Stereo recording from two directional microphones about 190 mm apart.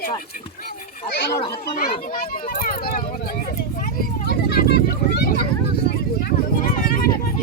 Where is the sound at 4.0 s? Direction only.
55° left (ahead or behind).